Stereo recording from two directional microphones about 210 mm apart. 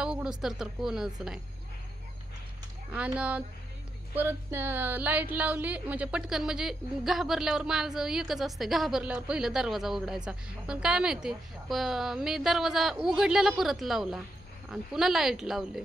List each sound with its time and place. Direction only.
0.0 s speech: 5° right (ahead or behind)
3.2 s speech: 5° right (ahead or behind)